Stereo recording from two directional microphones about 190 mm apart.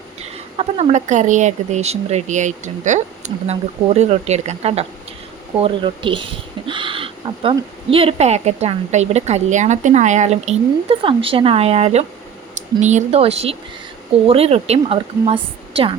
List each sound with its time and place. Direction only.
0.2 s speech: 35° right (ahead or behind)